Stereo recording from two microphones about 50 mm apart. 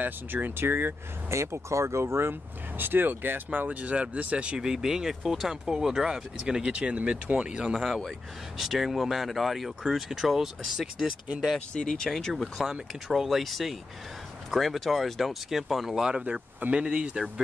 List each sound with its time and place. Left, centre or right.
0.0 s speech: right
1.3 s speech: right
2.8 s speech: right; by 7.8 s centre
8.5 s speech: centre
11.7 s speech: centre
12.4 s speech: centre
16.3 s speech: right